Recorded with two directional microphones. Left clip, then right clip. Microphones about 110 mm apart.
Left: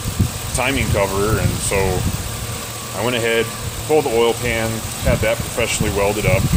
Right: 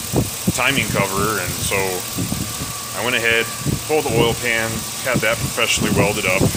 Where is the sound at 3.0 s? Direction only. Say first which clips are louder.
Right 1 dB; 25° left (ahead or behind).